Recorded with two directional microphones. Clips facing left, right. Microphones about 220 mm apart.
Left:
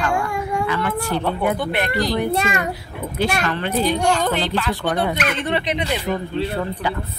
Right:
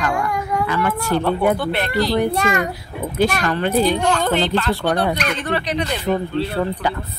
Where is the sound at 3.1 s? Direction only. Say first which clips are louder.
Right 3 dB; 40° right (ahead or behind).